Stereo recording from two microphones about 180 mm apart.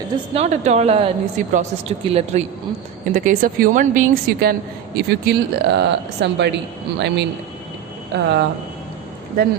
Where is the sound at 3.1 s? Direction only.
50° right (ahead or behind).